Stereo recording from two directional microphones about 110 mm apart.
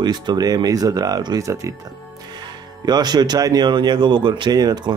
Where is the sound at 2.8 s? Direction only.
40° right (ahead or behind).